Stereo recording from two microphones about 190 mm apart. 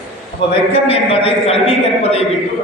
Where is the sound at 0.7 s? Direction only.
30° left (ahead or behind).